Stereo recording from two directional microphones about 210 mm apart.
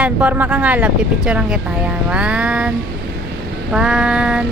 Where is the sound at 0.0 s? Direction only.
5° right (ahead or behind).